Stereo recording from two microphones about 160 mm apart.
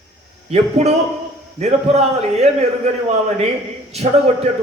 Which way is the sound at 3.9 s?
40° right (ahead or behind).